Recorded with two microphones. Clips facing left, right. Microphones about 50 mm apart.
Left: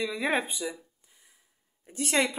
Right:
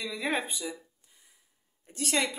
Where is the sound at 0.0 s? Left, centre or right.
Centre.